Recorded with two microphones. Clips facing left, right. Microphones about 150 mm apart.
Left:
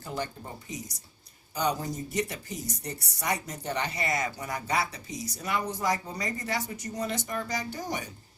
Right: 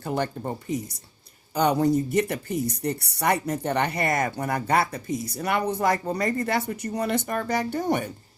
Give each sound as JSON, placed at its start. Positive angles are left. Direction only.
{"t": 0.0, "sound": "speech", "side_deg": -60}